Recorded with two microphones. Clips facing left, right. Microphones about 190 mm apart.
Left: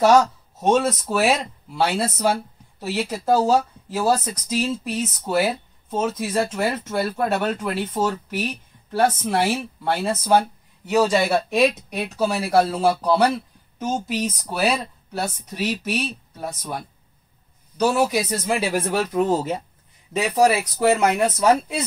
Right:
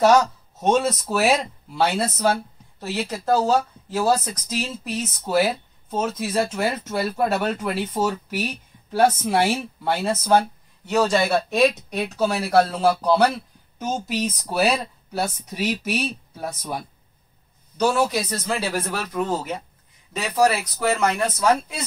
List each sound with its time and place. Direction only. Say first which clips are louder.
0.0 s speech: left 1 dB; centre (ahead or behind); by 19.6 s 25° left (ahead or behind)
20.2 s speech: left 2 dB; 15° left (ahead or behind)
20.7 s speech: left 3 dB; 25° left (ahead or behind)